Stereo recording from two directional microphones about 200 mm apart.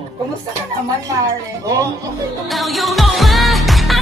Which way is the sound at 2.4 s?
Centre (ahead or behind).